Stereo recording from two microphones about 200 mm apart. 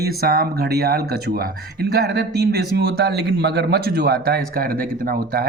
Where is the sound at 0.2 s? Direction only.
50° right (ahead or behind).